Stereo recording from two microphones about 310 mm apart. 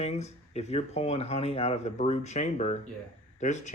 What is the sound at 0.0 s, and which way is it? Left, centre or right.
Speech, left.